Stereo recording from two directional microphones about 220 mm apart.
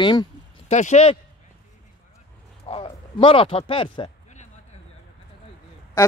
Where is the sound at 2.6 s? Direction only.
25° left (ahead or behind).